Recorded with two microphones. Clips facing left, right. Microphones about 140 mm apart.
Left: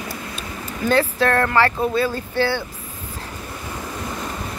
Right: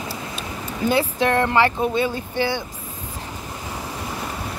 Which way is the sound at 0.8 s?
15° right (ahead or behind).